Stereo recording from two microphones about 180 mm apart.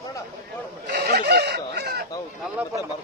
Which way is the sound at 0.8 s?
65° right (ahead or behind).